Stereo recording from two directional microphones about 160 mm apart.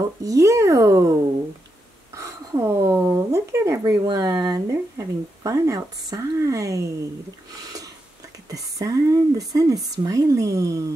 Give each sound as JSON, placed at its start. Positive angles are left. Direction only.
{"t": 0.2, "sound": "speech", "side_deg": -20}
{"t": 2.1, "sound": "a sound", "side_deg": -20}
{"t": 4.0, "sound": "speech", "side_deg": -25}
{"t": 8.5, "sound": "speech", "side_deg": -20}